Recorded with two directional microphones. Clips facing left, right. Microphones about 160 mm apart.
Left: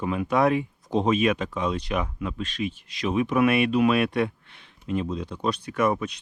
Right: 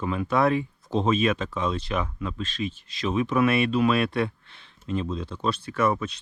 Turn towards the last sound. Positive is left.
turn(degrees=15)  # may be behind; listen again after turning